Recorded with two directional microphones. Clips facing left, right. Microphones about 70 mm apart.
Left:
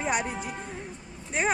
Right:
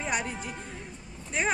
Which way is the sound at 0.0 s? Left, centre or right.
Centre.